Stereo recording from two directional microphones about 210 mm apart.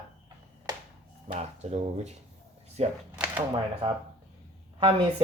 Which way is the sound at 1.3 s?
30° right (ahead or behind).